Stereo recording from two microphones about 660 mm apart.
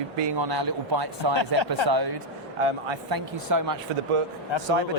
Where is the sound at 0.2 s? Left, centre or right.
Right.